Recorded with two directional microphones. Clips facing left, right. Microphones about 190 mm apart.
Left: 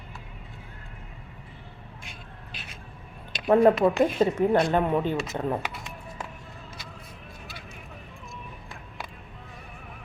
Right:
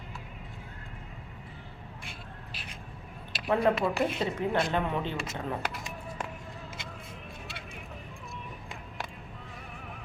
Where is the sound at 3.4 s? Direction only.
45° left (ahead or behind).